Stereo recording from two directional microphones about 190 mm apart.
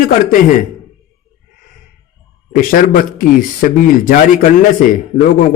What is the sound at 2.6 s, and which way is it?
A man's voice, 45° left (ahead or behind).